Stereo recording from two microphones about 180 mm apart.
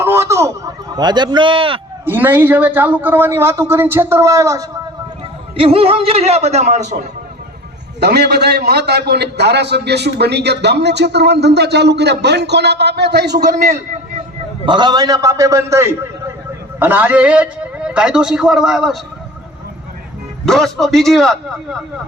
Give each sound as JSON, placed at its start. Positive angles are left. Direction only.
{"t": 0.0, "sound": "a sound", "side_deg": -15}
{"t": 2.0, "sound": "a man's voice", "side_deg": -10}
{"t": 5.5, "sound": "a man's voice", "side_deg": -30}
{"t": 7.9, "sound": "a man's voice", "side_deg": -65}
{"t": 14.6, "sound": "a man's voice", "side_deg": -25}
{"t": 20.4, "sound": "a man's voice", "side_deg": 0}